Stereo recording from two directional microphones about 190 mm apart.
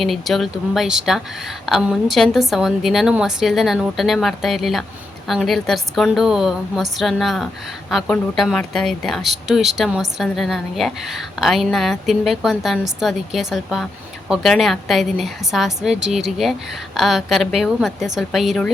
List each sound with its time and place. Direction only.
0.0 s speech: centre (ahead or behind)